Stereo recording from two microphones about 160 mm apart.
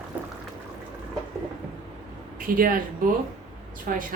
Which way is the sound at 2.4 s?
65° right (ahead or behind).